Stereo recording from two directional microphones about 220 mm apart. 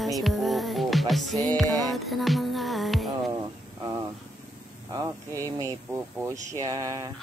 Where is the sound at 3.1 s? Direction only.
15° right (ahead or behind).